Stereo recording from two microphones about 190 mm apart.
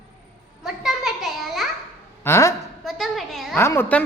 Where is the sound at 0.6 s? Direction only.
Centre (ahead or behind).